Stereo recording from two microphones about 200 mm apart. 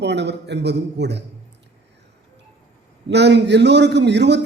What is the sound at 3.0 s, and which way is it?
A man's voice, 60° right (ahead or behind).